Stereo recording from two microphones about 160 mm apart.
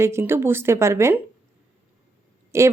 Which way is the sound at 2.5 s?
15° right (ahead or behind).